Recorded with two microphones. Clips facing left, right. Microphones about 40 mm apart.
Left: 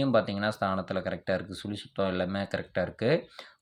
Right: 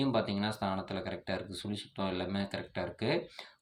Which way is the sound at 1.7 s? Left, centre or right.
Left.